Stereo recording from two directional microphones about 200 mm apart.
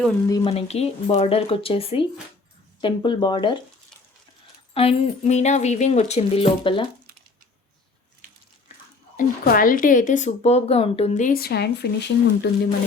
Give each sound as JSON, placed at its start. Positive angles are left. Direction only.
{"t": 0.3, "sound": "speech", "side_deg": 20}
{"t": 0.5, "sound": "speech", "side_deg": 30}
{"t": 4.7, "sound": "speech", "side_deg": 30}
{"t": 9.1, "sound": "speech", "side_deg": 45}